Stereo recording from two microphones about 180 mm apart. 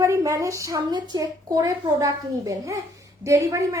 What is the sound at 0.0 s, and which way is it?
A woman's voice, 15° right (ahead or behind).